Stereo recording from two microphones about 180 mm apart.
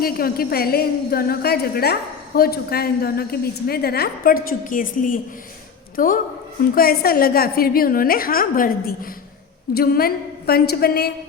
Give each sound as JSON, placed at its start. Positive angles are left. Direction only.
{"t": 0.0, "sound": "a woman's voice", "side_deg": 55}